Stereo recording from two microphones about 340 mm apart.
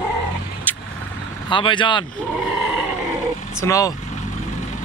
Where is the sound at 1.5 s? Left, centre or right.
Centre.